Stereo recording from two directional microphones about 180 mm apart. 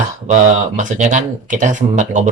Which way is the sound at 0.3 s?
45° right (ahead or behind).